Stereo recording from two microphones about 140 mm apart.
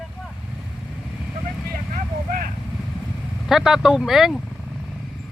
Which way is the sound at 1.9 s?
90° right.